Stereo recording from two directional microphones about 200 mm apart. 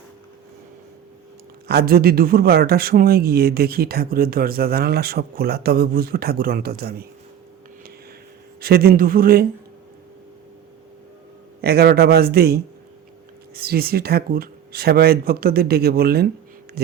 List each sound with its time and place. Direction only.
1.6 s speech: 50° right (ahead or behind)
8.6 s speech: 50° right (ahead or behind)
11.6 s speech: 50° right (ahead or behind)